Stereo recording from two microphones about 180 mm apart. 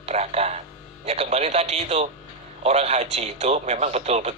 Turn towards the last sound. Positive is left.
turn(degrees=-35)  # may be behind; listen again after turning